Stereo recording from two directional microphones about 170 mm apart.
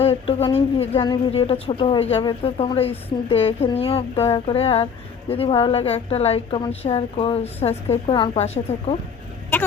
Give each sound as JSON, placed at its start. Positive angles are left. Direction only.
{"t": 0.0, "sound": "a woman's voice", "side_deg": 35}